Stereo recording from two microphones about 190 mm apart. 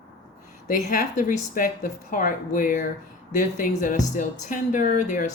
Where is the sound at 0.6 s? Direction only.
45° left (ahead or behind).